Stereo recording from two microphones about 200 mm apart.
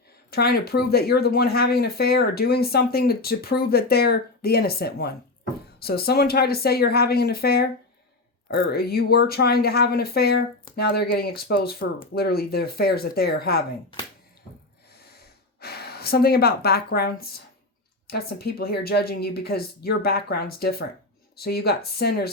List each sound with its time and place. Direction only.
0.3 s speech: 50° left (ahead or behind)
15.6 s speech: 50° left (ahead or behind)